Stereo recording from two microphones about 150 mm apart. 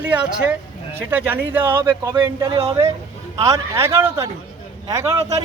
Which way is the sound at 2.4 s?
25° right (ahead or behind).